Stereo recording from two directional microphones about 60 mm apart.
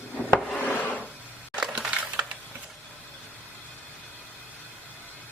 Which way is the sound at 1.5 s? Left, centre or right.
Centre.